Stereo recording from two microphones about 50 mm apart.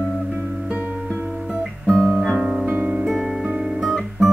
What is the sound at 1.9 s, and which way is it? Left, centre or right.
Guitar, centre.